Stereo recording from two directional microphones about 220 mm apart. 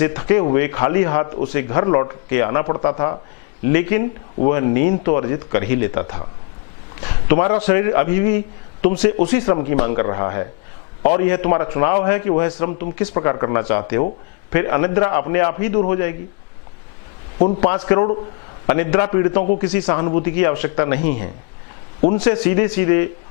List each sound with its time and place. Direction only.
0.0 s a man's voice: 15° left (ahead or behind)
17.6 s a man's voice: 15° left (ahead or behind)